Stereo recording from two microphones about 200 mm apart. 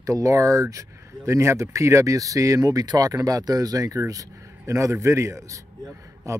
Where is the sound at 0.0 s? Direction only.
15° right (ahead or behind).